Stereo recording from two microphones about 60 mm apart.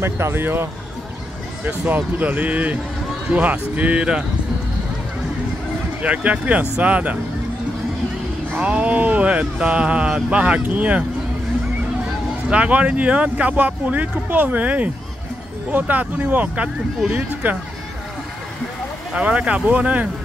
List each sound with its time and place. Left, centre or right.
0.0 s speech: right
1.6 s speech: right
6.0 s speech: right
8.5 s speech: right
12.4 s speech: right
19.1 s speech: right